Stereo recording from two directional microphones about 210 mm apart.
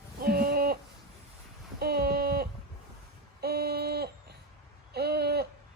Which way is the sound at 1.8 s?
50° right (ahead or behind).